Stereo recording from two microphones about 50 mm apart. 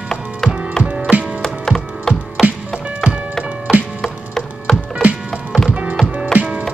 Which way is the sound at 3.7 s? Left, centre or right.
Centre.